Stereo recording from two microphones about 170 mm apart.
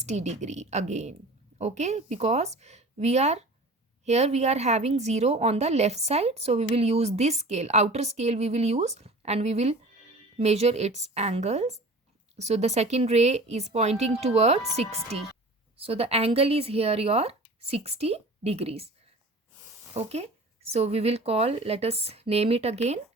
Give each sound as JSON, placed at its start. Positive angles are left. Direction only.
{"t": 0.0, "sound": "a woman's voice", "side_deg": -40}
{"t": 19.9, "sound": "a woman's voice", "side_deg": -35}